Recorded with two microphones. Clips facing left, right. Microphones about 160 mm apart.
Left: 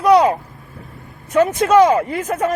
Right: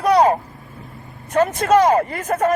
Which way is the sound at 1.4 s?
45° right (ahead or behind).